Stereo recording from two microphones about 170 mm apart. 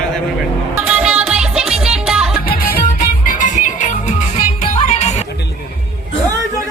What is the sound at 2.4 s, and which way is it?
Music, 55° left (ahead or behind).